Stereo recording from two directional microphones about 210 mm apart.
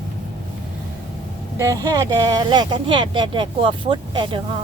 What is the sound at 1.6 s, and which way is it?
Speech, 15° right (ahead or behind).